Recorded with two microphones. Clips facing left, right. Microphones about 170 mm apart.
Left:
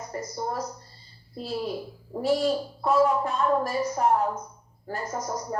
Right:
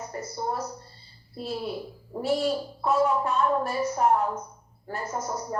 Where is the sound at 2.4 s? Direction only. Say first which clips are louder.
Left 1 dB; 35° left (ahead or behind).